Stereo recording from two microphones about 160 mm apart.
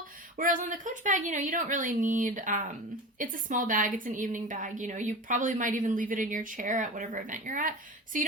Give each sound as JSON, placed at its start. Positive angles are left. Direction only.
{"t": 0.3, "sound": "a woman's voice", "side_deg": -55}